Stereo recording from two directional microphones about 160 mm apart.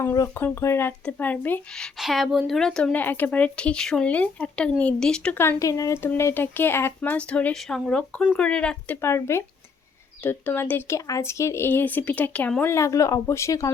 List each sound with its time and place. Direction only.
0.0 s speech: 15° left (ahead or behind)